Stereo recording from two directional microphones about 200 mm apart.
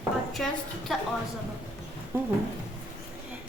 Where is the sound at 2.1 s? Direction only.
10° right (ahead or behind).